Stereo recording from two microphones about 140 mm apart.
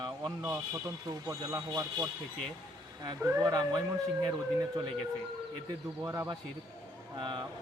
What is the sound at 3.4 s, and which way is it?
Speech, 30° right (ahead or behind).